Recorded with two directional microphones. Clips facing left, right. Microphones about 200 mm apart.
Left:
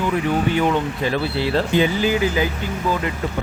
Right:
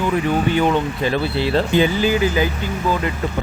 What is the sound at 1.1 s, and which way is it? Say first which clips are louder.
Speech: right 2 dB; 25° right (ahead or behind).